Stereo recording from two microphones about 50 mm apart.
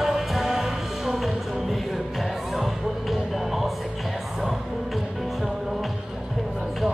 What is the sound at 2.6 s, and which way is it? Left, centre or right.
Music, centre.